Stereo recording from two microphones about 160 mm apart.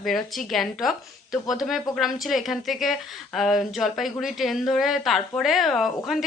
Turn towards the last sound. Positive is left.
turn(degrees=0)  # may be behind; listen again after turning